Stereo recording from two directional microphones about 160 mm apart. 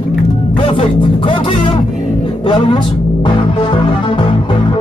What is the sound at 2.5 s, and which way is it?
Speech, 30° left (ahead or behind).